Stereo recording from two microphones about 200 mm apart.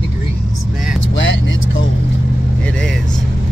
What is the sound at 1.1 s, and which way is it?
Speech, 70° left (ahead or behind).